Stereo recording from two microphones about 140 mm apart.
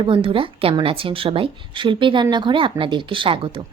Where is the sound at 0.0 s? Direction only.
40° right (ahead or behind).